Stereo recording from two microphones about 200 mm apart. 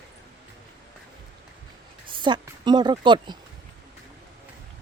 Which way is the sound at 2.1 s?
25° right (ahead or behind).